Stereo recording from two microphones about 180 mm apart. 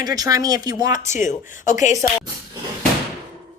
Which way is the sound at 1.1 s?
45° left (ahead or behind).